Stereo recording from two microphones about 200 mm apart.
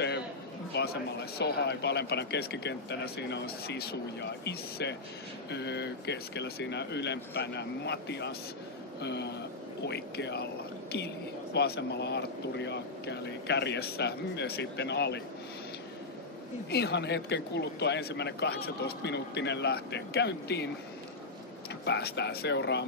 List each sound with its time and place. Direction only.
0.7 s a sound: 60° left (ahead or behind)
1.4 s speech: 55° left (ahead or behind)
16.7 s speech: 55° left (ahead or behind)
21.8 s speech: 55° left (ahead or behind)